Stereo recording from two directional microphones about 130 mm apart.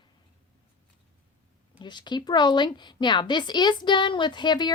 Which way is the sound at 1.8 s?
35° left (ahead or behind).